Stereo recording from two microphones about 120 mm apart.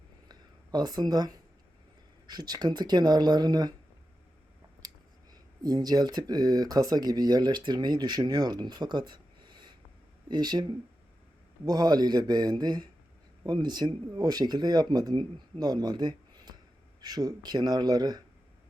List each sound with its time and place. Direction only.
0.3 s a sound: 35° right (ahead or behind)
2.2 s speech: 35° right (ahead or behind)
5.3 s speech: 35° right (ahead or behind)